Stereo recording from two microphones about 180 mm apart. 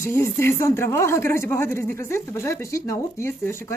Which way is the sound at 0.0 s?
15° left (ahead or behind).